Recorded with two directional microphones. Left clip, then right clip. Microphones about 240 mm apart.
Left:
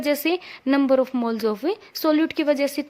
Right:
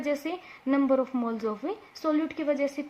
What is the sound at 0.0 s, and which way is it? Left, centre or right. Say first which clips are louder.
Speech: left 8 dB; left.